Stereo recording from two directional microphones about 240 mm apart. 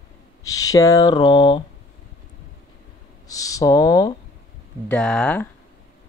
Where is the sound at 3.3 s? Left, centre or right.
Centre.